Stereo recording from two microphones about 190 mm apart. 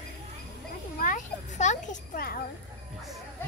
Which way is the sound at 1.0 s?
40° left (ahead or behind).